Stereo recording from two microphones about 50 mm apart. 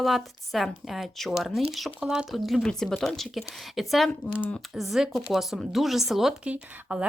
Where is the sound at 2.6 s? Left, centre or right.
Centre.